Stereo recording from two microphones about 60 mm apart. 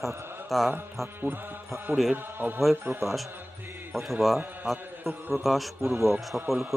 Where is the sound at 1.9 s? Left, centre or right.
Right.